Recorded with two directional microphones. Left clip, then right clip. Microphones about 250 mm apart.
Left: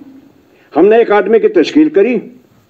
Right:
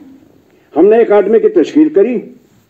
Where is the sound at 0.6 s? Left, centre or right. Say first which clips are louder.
Even; left.